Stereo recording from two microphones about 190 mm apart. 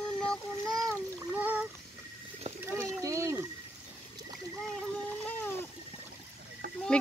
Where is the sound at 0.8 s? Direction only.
15° right (ahead or behind).